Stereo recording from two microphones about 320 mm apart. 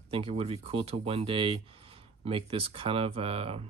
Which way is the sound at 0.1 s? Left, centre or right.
Centre.